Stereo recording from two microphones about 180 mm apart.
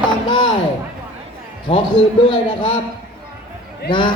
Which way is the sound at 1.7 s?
30° left (ahead or behind).